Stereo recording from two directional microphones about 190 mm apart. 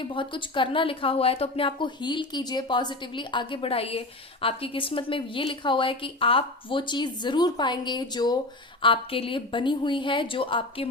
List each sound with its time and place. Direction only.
0.0 s speech: 25° left (ahead or behind)